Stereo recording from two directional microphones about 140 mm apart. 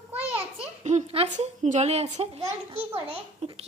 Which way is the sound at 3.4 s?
50° right (ahead or behind).